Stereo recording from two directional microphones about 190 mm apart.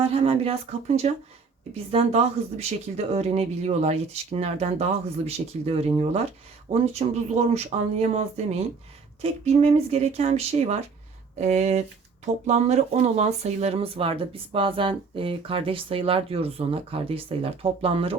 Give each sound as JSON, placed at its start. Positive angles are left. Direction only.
{"t": 0.0, "sound": "speech", "side_deg": -30}
{"t": 9.2, "sound": "speech", "side_deg": -35}